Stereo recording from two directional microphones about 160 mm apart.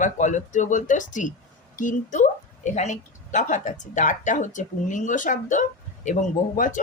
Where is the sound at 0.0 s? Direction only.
50° left (ahead or behind).